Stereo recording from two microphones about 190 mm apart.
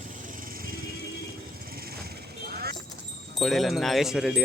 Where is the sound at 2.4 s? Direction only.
55° right (ahead or behind).